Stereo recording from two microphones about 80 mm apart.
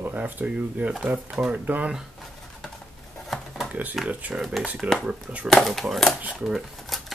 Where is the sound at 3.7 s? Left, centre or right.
Right.